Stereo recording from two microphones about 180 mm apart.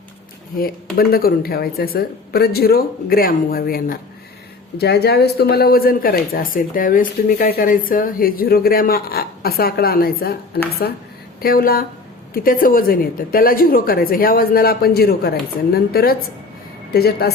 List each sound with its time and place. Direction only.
0.5 s speech: 55° left (ahead or behind)